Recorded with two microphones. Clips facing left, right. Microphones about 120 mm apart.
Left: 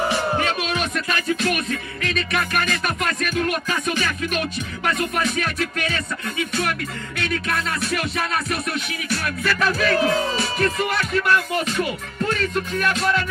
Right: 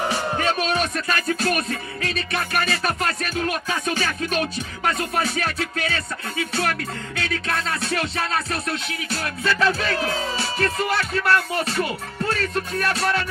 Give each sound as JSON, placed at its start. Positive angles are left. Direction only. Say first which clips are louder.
{"t": 0.4, "sound": "music", "louder": "right 1 dB", "side_deg": -40}